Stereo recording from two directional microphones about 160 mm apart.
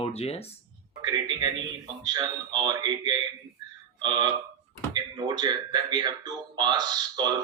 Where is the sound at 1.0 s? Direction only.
25° right (ahead or behind).